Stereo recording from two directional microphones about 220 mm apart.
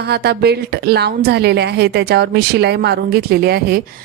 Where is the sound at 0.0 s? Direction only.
45° right (ahead or behind).